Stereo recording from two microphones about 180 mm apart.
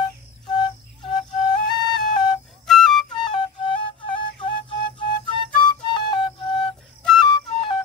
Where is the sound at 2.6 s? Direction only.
Centre (ahead or behind).